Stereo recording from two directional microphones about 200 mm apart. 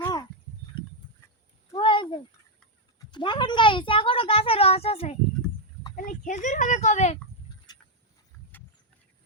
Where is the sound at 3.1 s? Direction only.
25° left (ahead or behind).